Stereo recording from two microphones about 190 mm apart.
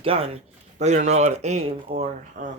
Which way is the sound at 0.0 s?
30° right (ahead or behind).